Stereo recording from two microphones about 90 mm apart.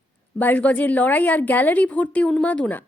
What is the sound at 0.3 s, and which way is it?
A woman's voice, 20° left (ahead or behind).